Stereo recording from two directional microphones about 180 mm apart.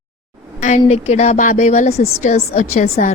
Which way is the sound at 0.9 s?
35° left (ahead or behind).